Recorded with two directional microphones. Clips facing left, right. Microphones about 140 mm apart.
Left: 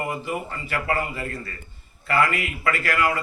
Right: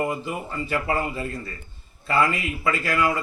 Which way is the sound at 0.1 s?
20° right (ahead or behind).